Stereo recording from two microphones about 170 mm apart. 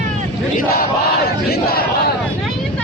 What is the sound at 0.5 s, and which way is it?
Battle cry, 60° left (ahead or behind).